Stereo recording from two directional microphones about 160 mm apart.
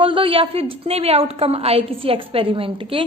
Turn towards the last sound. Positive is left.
turn(degrees=-35)  # may be behind; listen again after turning